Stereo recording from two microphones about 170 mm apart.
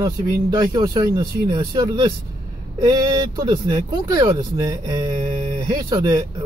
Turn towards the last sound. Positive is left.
turn(degrees=-20)  # may be behind; listen again after turning